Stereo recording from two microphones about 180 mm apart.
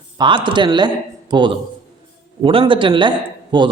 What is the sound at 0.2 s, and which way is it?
A man's voice, 25° right (ahead or behind).